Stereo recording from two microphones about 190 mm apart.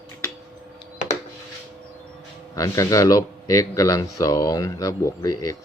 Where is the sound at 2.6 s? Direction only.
15° left (ahead or behind).